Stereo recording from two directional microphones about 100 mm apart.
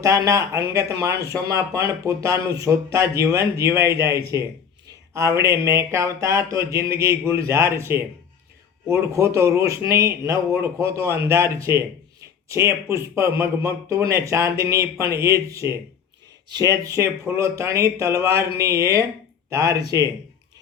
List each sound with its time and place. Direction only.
0.0 s speech: 30° right (ahead or behind)